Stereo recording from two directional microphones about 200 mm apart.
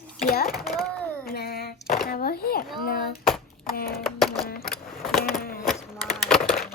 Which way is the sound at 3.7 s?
50° left (ahead or behind).